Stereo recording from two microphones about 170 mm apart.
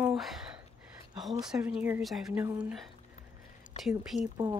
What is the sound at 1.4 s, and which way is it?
Speech, 5° right (ahead or behind).